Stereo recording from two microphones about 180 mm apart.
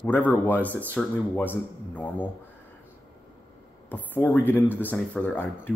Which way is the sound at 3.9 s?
10° left (ahead or behind).